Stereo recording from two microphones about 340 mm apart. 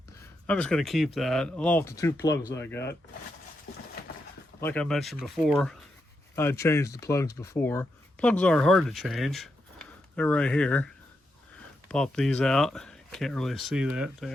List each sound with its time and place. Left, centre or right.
0.4 s speech: centre
4.6 s speech: centre